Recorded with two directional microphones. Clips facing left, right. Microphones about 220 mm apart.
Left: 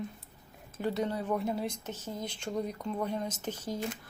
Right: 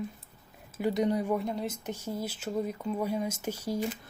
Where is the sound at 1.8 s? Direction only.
10° right (ahead or behind).